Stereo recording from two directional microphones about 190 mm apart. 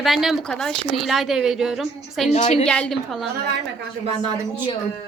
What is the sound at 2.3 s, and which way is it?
Speech, 35° left (ahead or behind).